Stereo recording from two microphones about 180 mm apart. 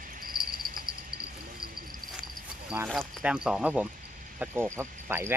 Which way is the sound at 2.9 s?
Centre (ahead or behind).